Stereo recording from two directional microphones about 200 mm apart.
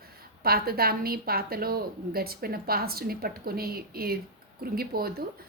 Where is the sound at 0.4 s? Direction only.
50° right (ahead or behind).